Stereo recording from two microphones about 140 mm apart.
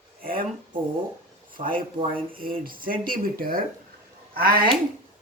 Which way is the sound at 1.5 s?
85° right.